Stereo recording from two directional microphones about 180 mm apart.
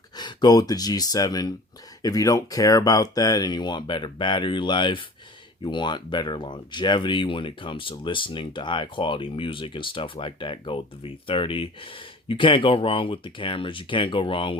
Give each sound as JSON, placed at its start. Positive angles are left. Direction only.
{"t": 0.2, "sound": "speech", "side_deg": 20}